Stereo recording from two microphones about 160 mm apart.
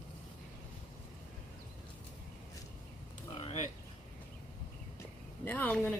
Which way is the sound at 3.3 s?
35° left (ahead or behind).